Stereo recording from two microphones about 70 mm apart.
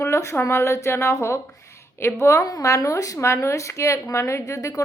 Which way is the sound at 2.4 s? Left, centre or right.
Left.